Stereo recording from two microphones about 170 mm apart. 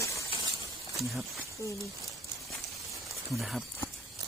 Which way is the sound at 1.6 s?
15° left (ahead or behind).